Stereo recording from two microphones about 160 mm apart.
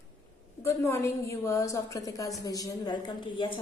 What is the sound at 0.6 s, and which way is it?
A woman's voice, 15° left (ahead or behind).